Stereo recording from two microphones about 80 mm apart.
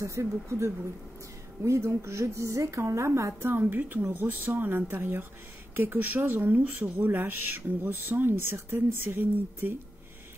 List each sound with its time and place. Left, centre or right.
0.0 s a woman's voice: right
3.4 s speech: right